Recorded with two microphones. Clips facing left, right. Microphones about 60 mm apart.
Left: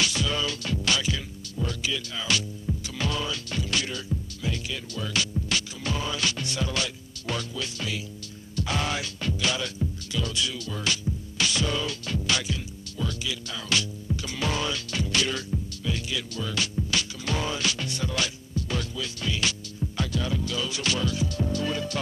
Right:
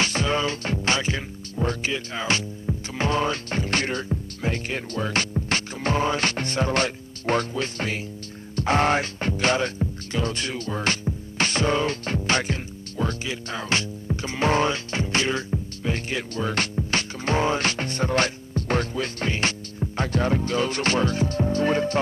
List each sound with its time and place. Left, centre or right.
0.0 s speech: right